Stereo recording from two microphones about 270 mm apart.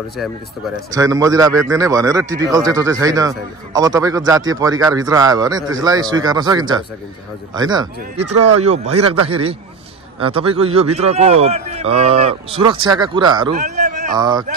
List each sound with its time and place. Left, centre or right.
0.9 s speech: centre
8.2 s speech: right
9.3 s speech: right
13.6 s a sound: right
14.1 s speech: centre